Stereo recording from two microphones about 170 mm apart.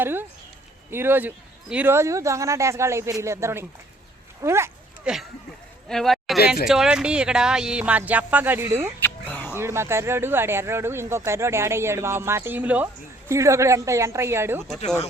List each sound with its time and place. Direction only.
0.0 s speech: 10° right (ahead or behind)
5.1 s a man's voice: 5° right (ahead or behind)
9.0 s a sound: 10° left (ahead or behind)
9.6 s speech: 15° right (ahead or behind)